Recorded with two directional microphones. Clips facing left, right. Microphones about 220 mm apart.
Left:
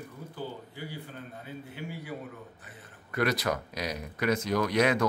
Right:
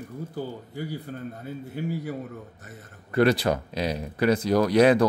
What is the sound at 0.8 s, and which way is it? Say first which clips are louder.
A man's voice: right 11 dB; 40° right (ahead or behind).